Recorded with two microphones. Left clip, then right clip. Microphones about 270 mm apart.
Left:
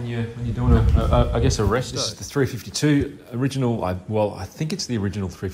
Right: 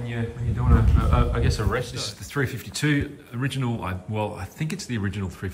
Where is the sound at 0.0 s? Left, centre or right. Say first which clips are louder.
Left 2 dB; centre.